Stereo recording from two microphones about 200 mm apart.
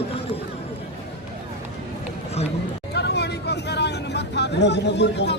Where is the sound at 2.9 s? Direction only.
55° left (ahead or behind).